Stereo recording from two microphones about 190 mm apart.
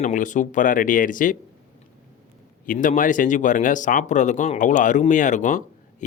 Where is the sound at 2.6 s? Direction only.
45° left (ahead or behind).